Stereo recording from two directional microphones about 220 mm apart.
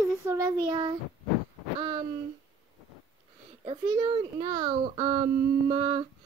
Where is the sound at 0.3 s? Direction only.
15° right (ahead or behind).